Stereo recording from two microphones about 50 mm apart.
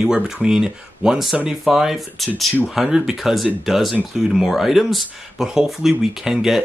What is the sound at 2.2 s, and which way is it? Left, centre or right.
Speech, centre.